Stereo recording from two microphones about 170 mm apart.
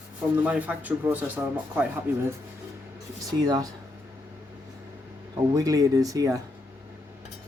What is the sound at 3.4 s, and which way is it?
Speech, 20° right (ahead or behind).